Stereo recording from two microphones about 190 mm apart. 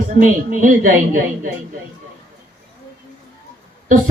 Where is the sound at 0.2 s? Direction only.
45° right (ahead or behind).